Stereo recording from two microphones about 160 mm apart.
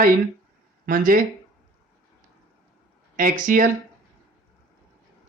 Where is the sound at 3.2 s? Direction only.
60° right (ahead or behind).